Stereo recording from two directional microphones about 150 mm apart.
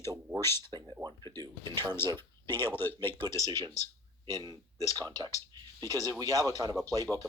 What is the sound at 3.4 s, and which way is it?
Speech, 25° right (ahead or behind).